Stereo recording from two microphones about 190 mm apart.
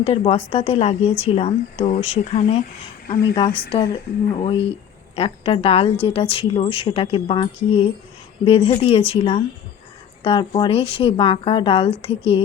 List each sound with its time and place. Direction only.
0.0 s speech: 30° left (ahead or behind)